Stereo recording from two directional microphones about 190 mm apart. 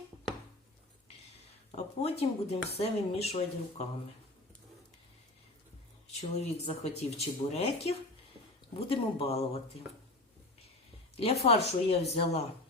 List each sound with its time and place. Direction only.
1.7 s speech: 35° left (ahead or behind)
6.1 s speech: 35° left (ahead or behind)
11.2 s speech: 35° left (ahead or behind)